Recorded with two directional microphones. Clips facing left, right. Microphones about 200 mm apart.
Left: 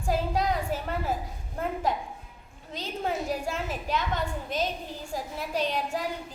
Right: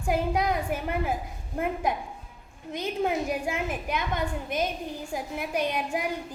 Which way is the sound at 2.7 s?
15° right (ahead or behind).